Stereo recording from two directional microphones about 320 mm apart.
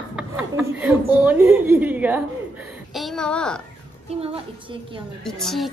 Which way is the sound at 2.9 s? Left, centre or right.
Centre.